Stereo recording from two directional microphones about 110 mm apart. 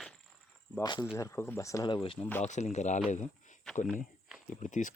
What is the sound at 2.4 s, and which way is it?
Speech, 90° left.